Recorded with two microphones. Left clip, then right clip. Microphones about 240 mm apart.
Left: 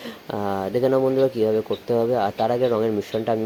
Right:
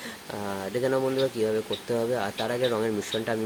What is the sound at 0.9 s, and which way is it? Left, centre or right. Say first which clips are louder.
Speech: left 6 dB; centre.